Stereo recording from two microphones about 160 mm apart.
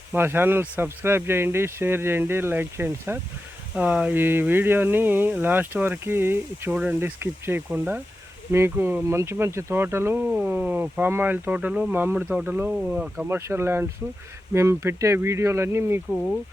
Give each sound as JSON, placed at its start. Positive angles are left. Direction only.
{"t": 0.1, "sound": "speech", "side_deg": -15}